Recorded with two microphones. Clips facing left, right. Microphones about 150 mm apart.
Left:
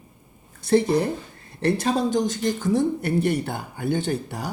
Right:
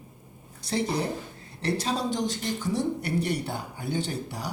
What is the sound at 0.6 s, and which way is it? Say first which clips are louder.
A woman's voice: left 8 dB; 55° left (ahead or behind).